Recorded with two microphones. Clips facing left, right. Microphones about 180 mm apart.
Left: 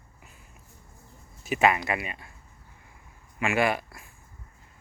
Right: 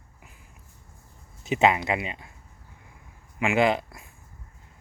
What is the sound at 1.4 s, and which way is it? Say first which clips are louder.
Speech: right 2 dB; 20° right (ahead or behind).